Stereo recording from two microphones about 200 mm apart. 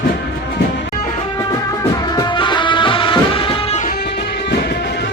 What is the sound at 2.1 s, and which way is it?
Music, 25° left (ahead or behind).